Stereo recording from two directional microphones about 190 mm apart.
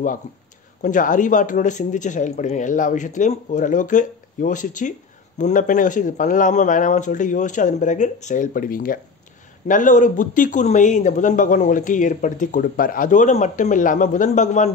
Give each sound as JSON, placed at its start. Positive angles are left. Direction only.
{"t": 0.8, "sound": "speech", "side_deg": 45}